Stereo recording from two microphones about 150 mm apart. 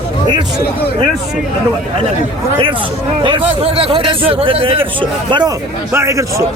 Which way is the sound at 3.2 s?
40° right (ahead or behind).